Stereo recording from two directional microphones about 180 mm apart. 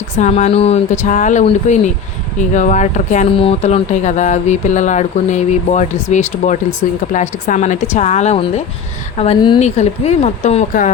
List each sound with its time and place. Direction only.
0.2 s speech: 40° left (ahead or behind)